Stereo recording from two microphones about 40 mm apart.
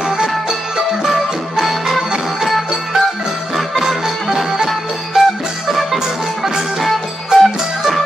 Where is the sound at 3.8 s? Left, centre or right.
Centre.